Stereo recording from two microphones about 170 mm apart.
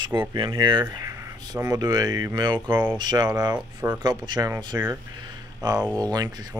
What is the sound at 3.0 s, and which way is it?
Speech, 25° right (ahead or behind).